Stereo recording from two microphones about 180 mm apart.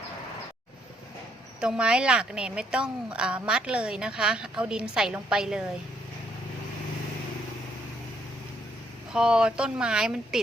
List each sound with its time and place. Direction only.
1.6 s a woman's voice: 5° right (ahead or behind)
9.1 s a woman's voice: 5° right (ahead or behind)